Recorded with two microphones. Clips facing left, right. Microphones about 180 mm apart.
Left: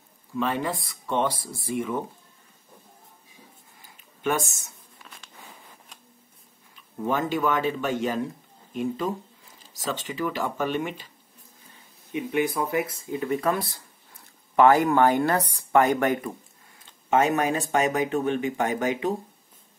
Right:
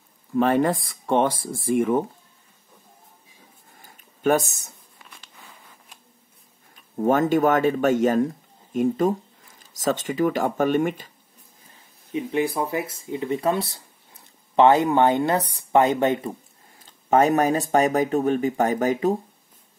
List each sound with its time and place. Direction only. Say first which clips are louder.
0.4 s speech: right 7 dB; 50° right (ahead or behind)
3.8 s a sound: right 6 dB; 45° right (ahead or behind)
6.7 s speech: right 7 dB; 50° right (ahead or behind)
12.3 s speech: right 1 dB; 25° right (ahead or behind)
16.8 s speech: right 4 dB; 40° right (ahead or behind)